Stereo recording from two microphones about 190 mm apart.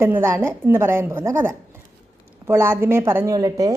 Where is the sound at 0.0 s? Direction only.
15° right (ahead or behind).